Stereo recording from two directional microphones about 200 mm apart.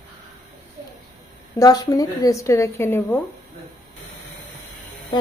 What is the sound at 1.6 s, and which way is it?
A woman's voice, 20° left (ahead or behind).